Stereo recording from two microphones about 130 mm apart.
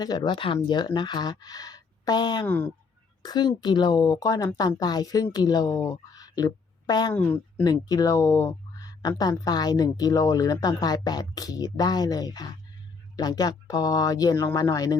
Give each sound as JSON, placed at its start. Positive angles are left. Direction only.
{"t": 0.0, "sound": "speech", "side_deg": 35}
{"t": 2.5, "sound": "a woman's voice", "side_deg": 15}
{"t": 3.2, "sound": "a woman's voice", "side_deg": 35}
{"t": 7.1, "sound": "a woman's voice", "side_deg": 15}
{"t": 7.6, "sound": "speech", "side_deg": 30}